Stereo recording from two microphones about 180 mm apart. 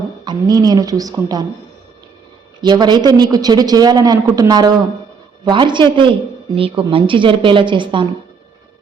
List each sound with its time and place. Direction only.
0.3 s a man's voice: 20° right (ahead or behind)
2.6 s a man's voice: 25° right (ahead or behind)